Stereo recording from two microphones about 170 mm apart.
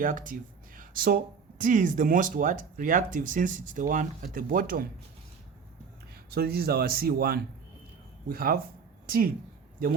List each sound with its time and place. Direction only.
0.0 s speech: 50° right (ahead or behind)
6.3 s a woman's voice: 65° right (ahead or behind)